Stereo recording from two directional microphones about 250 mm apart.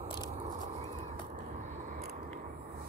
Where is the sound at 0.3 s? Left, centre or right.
Right.